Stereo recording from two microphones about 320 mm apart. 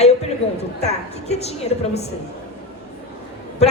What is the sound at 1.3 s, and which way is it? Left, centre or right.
Speech, centre.